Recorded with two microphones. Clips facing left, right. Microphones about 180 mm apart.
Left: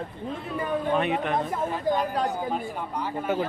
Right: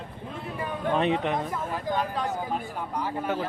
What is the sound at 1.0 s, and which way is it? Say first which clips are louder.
Speech: right 1 dB; 30° right (ahead or behind).